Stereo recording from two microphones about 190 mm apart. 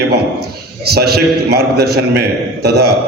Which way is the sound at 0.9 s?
55° right (ahead or behind).